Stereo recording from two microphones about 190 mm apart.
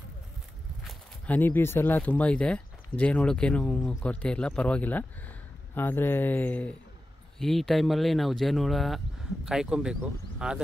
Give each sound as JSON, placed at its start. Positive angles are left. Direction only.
{"t": 0.8, "sound": "speech", "side_deg": 5}